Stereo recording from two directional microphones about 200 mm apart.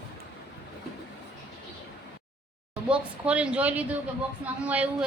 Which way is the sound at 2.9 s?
5° right (ahead or behind).